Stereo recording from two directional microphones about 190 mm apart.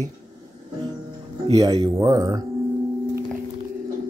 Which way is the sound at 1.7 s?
20° right (ahead or behind).